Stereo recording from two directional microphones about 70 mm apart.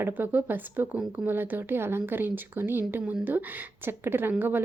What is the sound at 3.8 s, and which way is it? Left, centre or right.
Speech, right.